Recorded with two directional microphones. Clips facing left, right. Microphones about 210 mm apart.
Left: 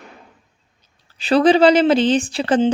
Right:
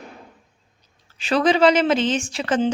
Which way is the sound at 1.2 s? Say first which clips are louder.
Left 5 dB; 35° left (ahead or behind).